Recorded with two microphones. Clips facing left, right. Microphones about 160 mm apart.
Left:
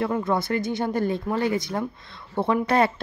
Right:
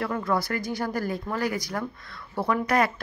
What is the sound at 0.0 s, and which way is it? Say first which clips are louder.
Speech: left 3 dB; 25° left (ahead or behind).